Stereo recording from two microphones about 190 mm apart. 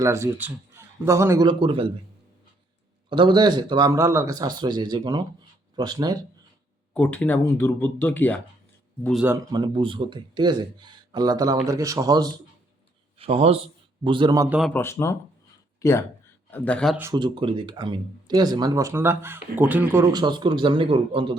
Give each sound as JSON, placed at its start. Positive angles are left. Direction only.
{"t": 0.0, "sound": "speech", "side_deg": -15}
{"t": 3.1, "sound": "speech", "side_deg": -25}
{"t": 6.9, "sound": "speech", "side_deg": 10}
{"t": 9.2, "sound": "speech", "side_deg": -15}
{"t": 13.1, "sound": "a man's voice", "side_deg": -30}
{"t": 14.7, "sound": "speech", "side_deg": 10}
{"t": 17.0, "sound": "speech", "side_deg": -20}
{"t": 20.1, "sound": "speech", "side_deg": -25}